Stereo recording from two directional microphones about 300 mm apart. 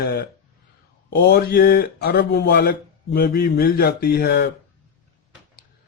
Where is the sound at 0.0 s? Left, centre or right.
Left.